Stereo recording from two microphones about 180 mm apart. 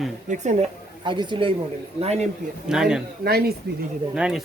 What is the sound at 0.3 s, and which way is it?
Speech, 40° right (ahead or behind).